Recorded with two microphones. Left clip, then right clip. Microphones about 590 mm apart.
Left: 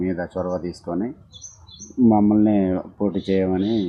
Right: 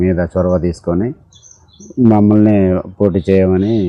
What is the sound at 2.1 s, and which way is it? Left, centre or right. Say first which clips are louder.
Speech: right 7 dB; right.